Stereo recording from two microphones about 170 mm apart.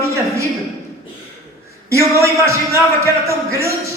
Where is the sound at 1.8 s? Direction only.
15° right (ahead or behind).